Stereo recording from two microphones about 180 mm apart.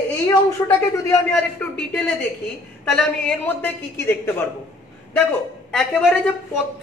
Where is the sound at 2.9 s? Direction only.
5° left (ahead or behind).